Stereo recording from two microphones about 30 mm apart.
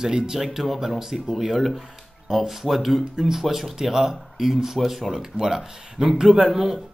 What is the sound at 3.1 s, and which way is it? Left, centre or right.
Speech, centre.